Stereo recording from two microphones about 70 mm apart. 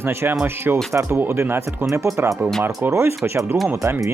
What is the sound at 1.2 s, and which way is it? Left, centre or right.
Speech, right.